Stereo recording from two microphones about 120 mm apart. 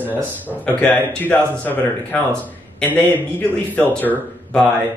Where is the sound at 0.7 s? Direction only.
15° left (ahead or behind).